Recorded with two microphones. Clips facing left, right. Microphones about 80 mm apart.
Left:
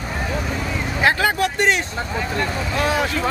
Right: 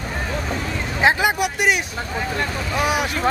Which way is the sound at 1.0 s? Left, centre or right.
Centre.